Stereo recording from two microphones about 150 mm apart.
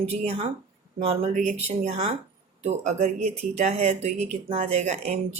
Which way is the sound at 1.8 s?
40° right (ahead or behind).